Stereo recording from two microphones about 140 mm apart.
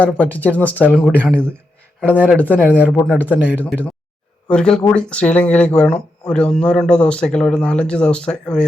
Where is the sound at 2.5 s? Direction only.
10° right (ahead or behind).